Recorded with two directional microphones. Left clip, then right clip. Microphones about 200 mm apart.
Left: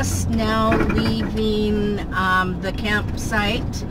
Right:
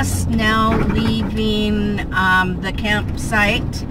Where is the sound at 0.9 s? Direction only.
15° right (ahead or behind).